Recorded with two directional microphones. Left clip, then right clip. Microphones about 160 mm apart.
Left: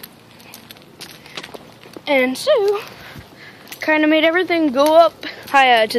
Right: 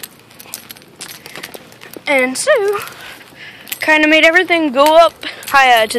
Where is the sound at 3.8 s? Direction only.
10° left (ahead or behind).